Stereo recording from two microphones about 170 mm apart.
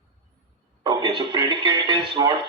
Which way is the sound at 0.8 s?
25° right (ahead or behind).